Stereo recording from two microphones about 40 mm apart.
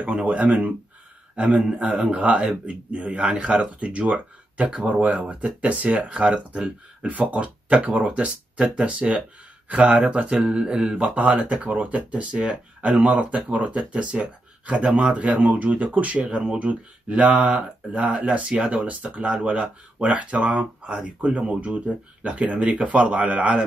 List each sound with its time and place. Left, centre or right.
0.2 s a man's voice: right
7.1 s speech: right
11.0 s speech: right
15.4 s speech: right
18.4 s speech: right
18.7 s speech: right